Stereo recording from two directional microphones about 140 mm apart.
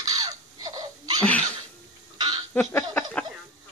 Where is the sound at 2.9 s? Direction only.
10° left (ahead or behind).